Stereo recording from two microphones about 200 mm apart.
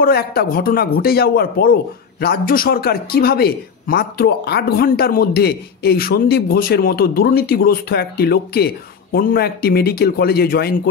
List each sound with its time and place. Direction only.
0.0 s a man's voice: 50° left (ahead or behind)